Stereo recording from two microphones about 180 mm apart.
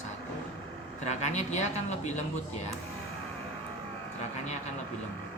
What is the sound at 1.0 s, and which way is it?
Speech, 40° left (ahead or behind).